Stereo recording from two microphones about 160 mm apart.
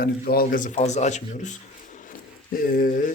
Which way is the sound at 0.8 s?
45° left (ahead or behind).